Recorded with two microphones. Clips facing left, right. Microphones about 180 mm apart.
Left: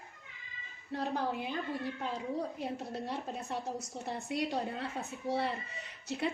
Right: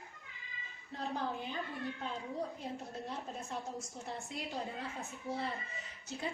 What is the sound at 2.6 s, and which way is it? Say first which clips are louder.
A woman's voice: left 5 dB; 75° left (ahead or behind).